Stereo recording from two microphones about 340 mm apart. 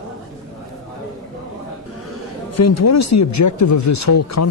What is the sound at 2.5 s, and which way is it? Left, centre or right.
Speech, left.